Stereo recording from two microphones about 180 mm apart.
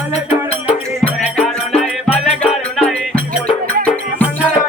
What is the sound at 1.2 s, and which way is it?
Music, 5° left (ahead or behind).